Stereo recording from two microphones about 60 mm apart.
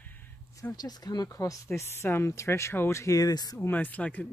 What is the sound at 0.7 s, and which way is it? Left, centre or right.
Speech, left.